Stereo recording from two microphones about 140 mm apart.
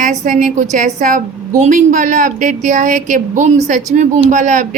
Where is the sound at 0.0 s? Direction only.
65° right (ahead or behind).